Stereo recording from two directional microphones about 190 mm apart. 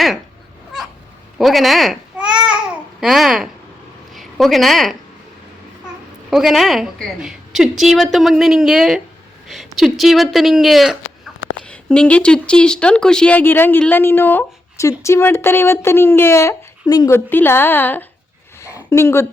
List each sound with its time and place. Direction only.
0.7 s cat: centre (ahead or behind)
1.4 s a woman's voice: centre (ahead or behind)
6.3 s a woman's voice: centre (ahead or behind)
18.6 s a sound: 15° left (ahead or behind)